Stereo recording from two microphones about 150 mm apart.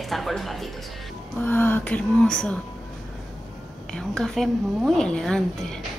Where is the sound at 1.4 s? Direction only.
15° left (ahead or behind).